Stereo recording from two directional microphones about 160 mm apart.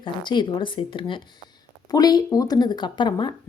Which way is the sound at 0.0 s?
30° left (ahead or behind).